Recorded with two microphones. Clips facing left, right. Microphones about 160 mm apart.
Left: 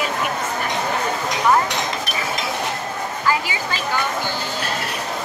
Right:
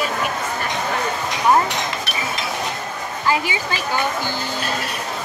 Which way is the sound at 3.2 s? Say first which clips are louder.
Right 2 dB; 20° right (ahead or behind).